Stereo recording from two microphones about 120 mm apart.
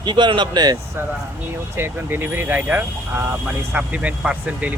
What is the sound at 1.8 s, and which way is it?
Speech, 15° right (ahead or behind).